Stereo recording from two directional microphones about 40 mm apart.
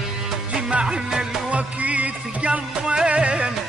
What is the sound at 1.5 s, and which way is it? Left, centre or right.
Music, right.